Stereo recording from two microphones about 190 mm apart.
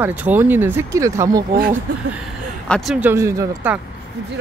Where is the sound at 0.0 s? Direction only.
10° right (ahead or behind).